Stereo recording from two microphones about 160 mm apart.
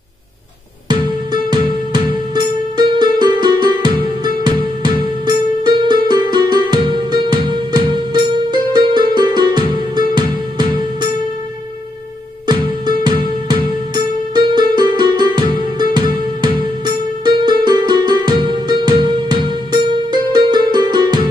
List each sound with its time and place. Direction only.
0.8 s music: 25° right (ahead or behind)
2.8 s music: 25° right (ahead or behind)
5.6 s music: 25° right (ahead or behind)
12.4 s music: 25° right (ahead or behind)